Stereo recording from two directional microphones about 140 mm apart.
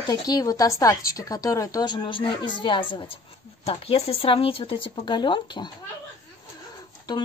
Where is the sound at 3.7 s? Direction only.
45° left (ahead or behind).